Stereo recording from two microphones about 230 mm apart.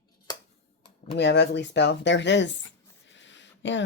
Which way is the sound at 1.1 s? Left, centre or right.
Left.